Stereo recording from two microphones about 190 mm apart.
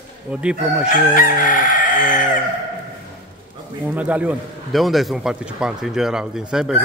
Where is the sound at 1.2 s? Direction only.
45° left (ahead or behind).